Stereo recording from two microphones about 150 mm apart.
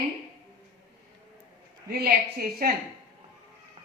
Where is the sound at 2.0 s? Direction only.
85° right.